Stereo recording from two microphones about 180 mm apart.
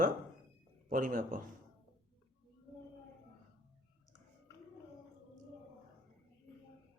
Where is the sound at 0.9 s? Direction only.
50° right (ahead or behind).